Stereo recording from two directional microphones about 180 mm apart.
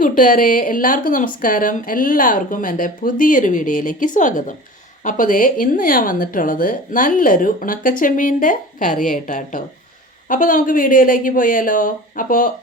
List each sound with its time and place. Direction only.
0.0 s a woman's voice: 50° left (ahead or behind)